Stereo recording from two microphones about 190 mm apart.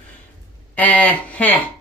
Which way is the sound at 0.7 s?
10° left (ahead or behind).